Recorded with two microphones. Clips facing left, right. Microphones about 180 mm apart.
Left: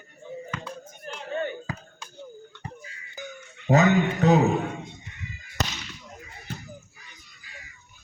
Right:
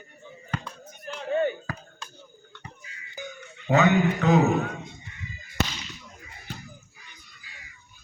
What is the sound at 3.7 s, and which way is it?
Speech, 40° left (ahead or behind).